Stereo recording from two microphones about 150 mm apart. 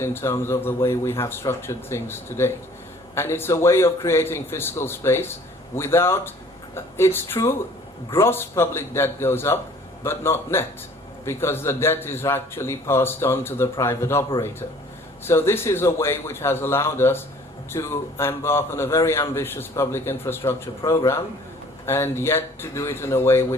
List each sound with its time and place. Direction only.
0.0 s a man's voice: 15° left (ahead or behind)